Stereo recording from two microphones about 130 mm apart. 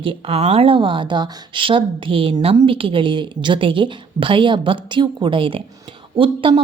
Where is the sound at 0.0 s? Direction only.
45° right (ahead or behind).